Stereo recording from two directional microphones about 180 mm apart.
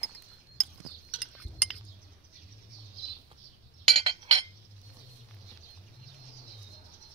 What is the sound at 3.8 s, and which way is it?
Chink, 30° right (ahead or behind).